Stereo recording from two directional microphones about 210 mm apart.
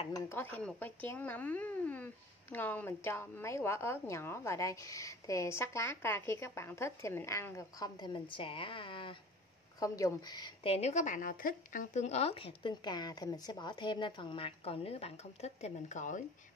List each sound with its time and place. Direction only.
0.1 s a woman's voice: 10° left (ahead or behind); by 16.3 s 35° left (ahead or behind)